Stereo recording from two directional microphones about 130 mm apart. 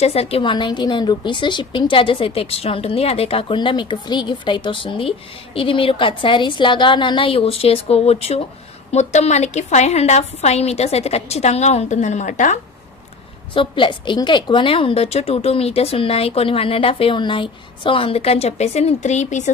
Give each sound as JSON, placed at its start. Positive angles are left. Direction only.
{"t": 0.0, "sound": "a woman's voice", "side_deg": 50}
{"t": 13.5, "sound": "a woman's voice", "side_deg": 40}